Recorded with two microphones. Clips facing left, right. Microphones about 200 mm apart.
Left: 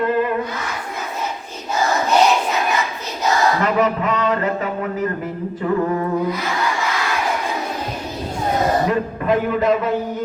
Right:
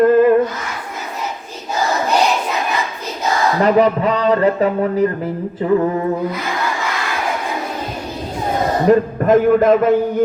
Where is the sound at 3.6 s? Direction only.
35° right (ahead or behind).